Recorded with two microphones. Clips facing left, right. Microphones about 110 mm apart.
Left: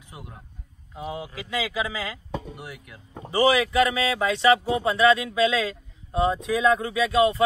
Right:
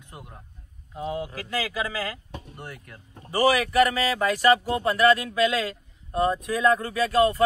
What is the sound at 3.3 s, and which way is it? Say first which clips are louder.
Speech: left 1 dB; 25° left (ahead or behind).